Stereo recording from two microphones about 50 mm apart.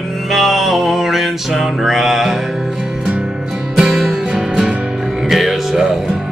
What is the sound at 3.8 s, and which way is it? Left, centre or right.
Music, centre.